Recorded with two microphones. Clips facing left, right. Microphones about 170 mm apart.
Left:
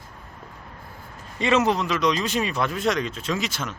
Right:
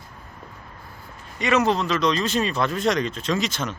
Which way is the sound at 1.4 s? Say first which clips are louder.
Even; 25° left (ahead or behind).